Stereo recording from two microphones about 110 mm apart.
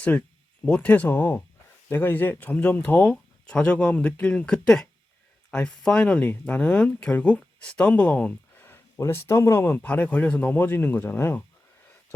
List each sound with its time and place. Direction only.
0.6 s speech: 10° left (ahead or behind)